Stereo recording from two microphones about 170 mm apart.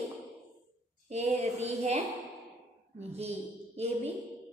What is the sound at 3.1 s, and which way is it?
A woman's voice, 40° right (ahead or behind).